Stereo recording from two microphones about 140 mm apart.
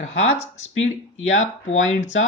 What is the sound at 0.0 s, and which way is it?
Speech, 50° left (ahead or behind).